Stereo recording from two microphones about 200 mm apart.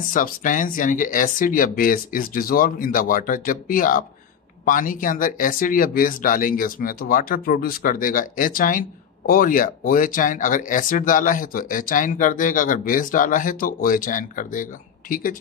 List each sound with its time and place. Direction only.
0.0 s speech: 40° left (ahead or behind)